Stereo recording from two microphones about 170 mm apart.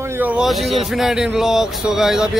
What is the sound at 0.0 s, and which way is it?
Speech, 10° right (ahead or behind).